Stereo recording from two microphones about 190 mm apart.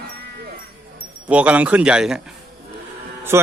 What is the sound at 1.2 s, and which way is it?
Speech, 5° right (ahead or behind).